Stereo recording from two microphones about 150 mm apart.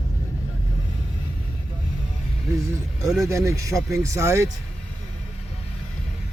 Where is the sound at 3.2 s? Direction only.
20° right (ahead or behind).